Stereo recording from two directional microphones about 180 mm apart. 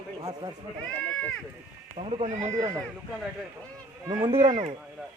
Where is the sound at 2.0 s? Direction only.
35° right (ahead or behind).